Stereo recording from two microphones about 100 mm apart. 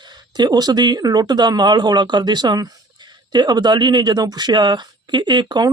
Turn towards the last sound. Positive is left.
turn(degrees=-45)  # may be behind; listen again after turning